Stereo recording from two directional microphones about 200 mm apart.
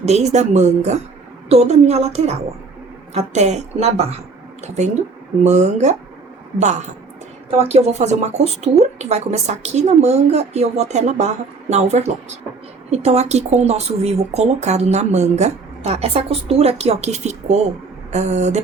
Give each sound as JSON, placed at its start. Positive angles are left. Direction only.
{"t": 0.0, "sound": "speech", "side_deg": -35}
{"t": 5.4, "sound": "speech", "side_deg": -35}
{"t": 7.6, "sound": "speech", "side_deg": -30}